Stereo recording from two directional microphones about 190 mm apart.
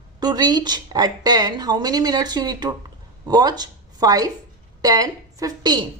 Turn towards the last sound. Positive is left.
turn(degrees=-20)  # may be behind; listen again after turning